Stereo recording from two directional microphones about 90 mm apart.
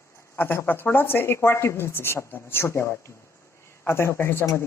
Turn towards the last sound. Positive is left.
turn(degrees=30)  # may be behind; listen again after turning